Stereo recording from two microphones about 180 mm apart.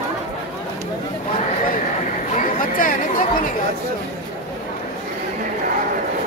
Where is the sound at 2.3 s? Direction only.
45° left (ahead or behind).